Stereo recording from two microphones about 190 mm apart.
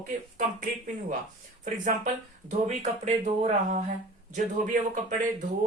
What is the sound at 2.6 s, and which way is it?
Speech, 40° right (ahead or behind).